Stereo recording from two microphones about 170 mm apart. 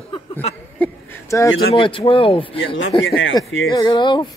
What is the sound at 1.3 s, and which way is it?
Speech, 20° left (ahead or behind).